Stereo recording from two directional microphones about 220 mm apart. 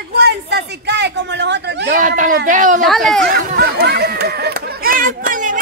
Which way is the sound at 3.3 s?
45° right (ahead or behind).